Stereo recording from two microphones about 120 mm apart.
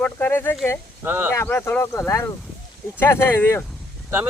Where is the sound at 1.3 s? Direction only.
20° left (ahead or behind).